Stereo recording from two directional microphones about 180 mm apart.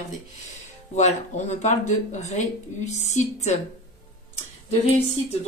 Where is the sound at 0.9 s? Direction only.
40° left (ahead or behind).